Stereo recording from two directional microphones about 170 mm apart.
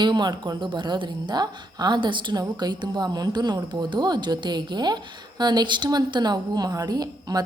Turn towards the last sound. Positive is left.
turn(degrees=-25)  # may be behind; listen again after turning